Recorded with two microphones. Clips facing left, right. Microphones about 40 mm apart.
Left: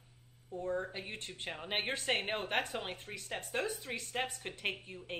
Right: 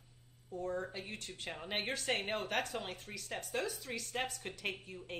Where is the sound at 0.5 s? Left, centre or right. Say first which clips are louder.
Left 2 dB; left.